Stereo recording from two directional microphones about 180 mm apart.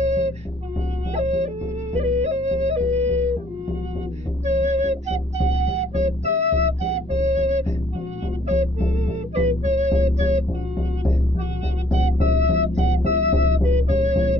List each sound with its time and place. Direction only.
0.0 s music: 40° right (ahead or behind)
4.5 s music: 40° right (ahead or behind)
11.9 s music: 35° right (ahead or behind)